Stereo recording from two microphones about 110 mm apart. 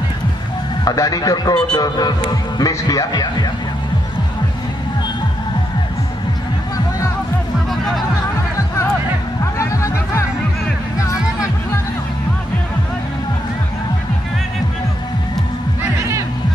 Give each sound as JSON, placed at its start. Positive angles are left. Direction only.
{"t": 0.8, "sound": "speech", "side_deg": 35}
{"t": 9.6, "sound": "music", "side_deg": 30}